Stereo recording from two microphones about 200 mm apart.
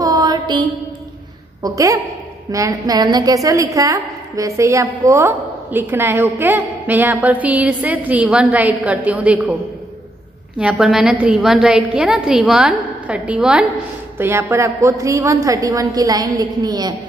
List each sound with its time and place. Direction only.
0.0 s mantra: 20° right (ahead or behind)
1.6 s a woman's voice: 15° right (ahead or behind)
10.6 s a woman's voice: 5° right (ahead or behind); by 16.9 s 20° right (ahead or behind)